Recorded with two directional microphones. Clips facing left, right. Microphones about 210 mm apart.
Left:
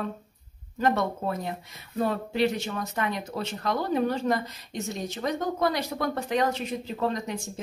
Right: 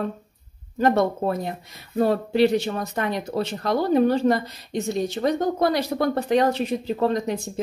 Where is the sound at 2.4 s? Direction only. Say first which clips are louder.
Right 6 dB; 35° right (ahead or behind).